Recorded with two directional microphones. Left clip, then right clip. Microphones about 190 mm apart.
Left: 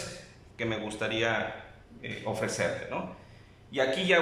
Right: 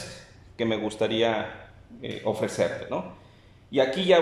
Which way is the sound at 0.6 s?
25° right (ahead or behind).